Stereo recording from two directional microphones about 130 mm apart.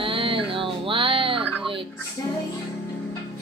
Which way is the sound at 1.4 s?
10° right (ahead or behind).